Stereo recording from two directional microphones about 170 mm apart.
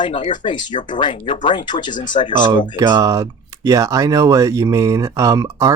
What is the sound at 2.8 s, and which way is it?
Speech, 25° right (ahead or behind).